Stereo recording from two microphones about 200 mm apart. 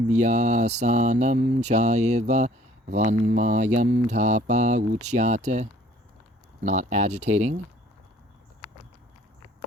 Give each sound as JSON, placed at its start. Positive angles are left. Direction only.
{"t": 0.1, "sound": "speech", "side_deg": -35}
{"t": 6.7, "sound": "speech", "side_deg": -35}